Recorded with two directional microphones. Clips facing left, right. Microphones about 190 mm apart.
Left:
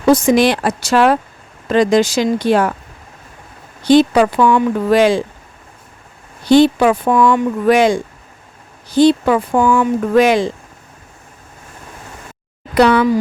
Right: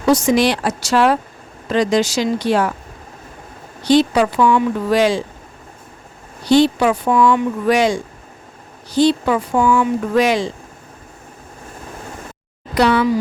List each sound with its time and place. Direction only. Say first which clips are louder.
0.1 s speech: left 3 dB; 55° left (ahead or behind)
3.8 s speech: left 3 dB; 55° left (ahead or behind)
6.5 s speech: left 3 dB; 50° left (ahead or behind)
12.7 s speech: left 3 dB; 60° left (ahead or behind)